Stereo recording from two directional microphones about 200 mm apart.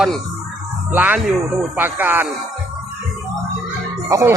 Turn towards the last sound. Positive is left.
turn(degrees=-15)  # may be behind; listen again after turning